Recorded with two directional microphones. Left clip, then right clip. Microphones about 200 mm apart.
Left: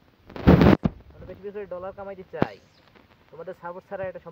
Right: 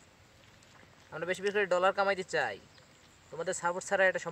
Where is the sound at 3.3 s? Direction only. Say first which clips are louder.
Right 3 dB; 45° right (ahead or behind).